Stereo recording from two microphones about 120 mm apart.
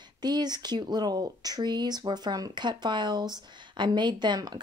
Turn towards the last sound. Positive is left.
turn(degrees=-35)  # may be behind; listen again after turning